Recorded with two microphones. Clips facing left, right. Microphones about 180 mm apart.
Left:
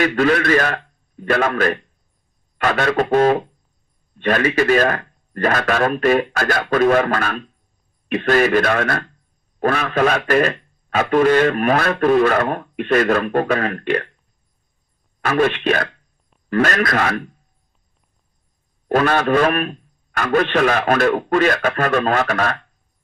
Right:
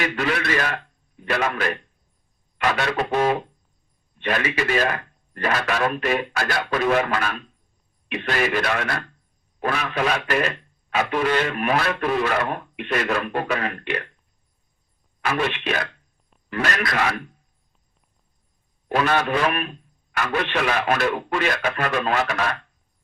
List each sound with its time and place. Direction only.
0.2 s a man's voice: 45° left (ahead or behind)
15.2 s a man's voice: 50° left (ahead or behind)
18.9 s a man's voice: 45° left (ahead or behind)